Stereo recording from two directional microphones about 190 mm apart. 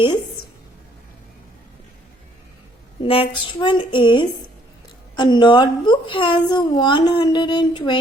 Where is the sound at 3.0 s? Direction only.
30° left (ahead or behind).